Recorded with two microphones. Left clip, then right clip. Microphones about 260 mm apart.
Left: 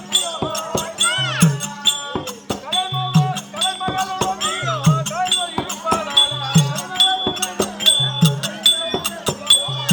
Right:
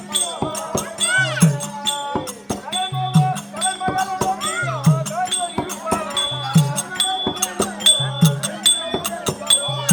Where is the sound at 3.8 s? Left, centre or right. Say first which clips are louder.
Right 1 dB; centre.